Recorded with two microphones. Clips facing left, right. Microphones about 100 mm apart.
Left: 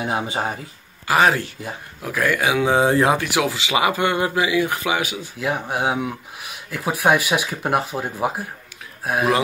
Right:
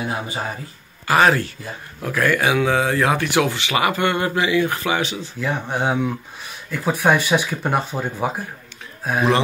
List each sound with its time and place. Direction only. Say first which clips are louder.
0.0 s speech: left 2 dB; 20° left (ahead or behind)
2.6 s speech: left 2 dB; 25° left (ahead or behind)
3.3 s speech: right 2 dB; 5° left (ahead or behind)